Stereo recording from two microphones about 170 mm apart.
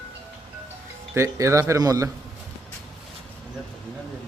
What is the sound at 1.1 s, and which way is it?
Speech, 15° right (ahead or behind).